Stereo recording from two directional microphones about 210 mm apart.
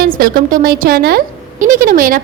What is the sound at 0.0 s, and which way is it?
Speech, 40° right (ahead or behind).